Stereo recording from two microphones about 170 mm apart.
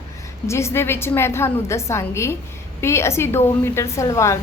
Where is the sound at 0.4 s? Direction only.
15° left (ahead or behind).